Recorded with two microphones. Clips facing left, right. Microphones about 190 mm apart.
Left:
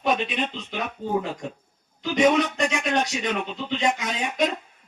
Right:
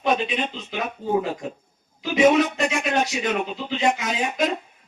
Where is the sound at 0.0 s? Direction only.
Centre (ahead or behind).